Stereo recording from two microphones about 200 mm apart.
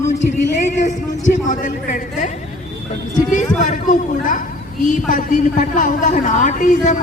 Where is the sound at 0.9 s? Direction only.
40° left (ahead or behind).